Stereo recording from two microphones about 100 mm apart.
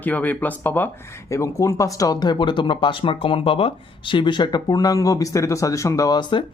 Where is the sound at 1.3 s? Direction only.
30° left (ahead or behind).